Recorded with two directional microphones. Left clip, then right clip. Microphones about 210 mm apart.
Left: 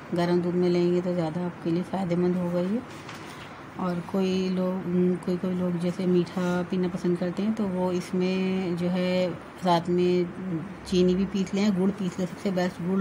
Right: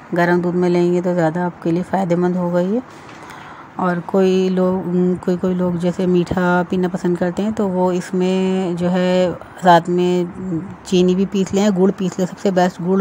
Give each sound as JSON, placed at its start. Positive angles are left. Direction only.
{"t": 0.1, "sound": "speech", "side_deg": -30}
{"t": 3.8, "sound": "speech", "side_deg": -30}